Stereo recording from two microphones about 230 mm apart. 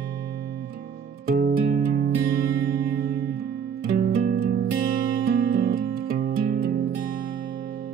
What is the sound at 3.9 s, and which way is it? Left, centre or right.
Music, right.